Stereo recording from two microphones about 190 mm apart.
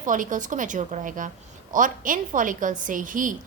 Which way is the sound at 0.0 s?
45° right (ahead or behind).